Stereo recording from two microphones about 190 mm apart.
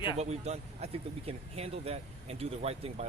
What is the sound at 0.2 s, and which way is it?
Speech, 35° right (ahead or behind).